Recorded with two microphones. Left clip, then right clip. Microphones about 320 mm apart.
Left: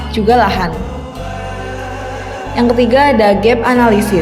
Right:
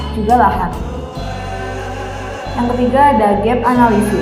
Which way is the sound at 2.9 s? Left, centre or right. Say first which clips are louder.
Right 1 dB; left.